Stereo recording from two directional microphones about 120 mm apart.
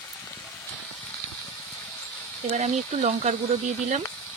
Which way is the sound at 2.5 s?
70° right (ahead or behind).